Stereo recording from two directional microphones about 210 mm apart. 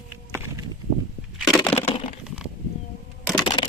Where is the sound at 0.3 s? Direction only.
15° right (ahead or behind).